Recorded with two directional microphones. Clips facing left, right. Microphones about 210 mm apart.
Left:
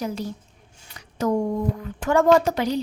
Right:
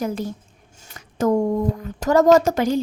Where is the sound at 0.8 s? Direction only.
45° right (ahead or behind).